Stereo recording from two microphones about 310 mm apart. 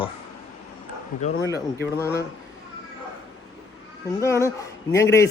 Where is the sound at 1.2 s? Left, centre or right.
Left.